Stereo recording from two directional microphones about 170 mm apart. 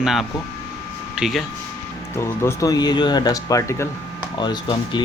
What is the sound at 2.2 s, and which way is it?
Speech, 15° left (ahead or behind).